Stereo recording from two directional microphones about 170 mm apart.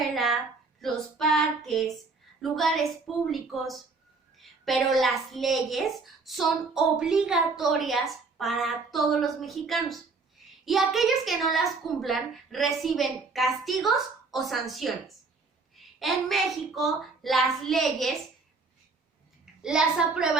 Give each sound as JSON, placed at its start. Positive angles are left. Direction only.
{"t": 0.1, "sound": "a sound", "side_deg": 0}
{"t": 0.8, "sound": "a child's voice", "side_deg": 0}
{"t": 19.6, "sound": "a child's voice", "side_deg": -5}